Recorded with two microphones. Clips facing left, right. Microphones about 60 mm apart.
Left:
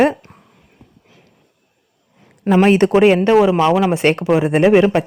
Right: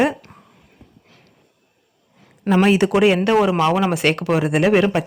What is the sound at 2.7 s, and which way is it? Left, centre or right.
Speech, left.